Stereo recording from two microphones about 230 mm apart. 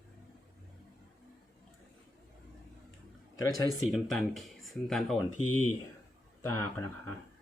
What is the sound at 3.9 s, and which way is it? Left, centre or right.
Speech, centre.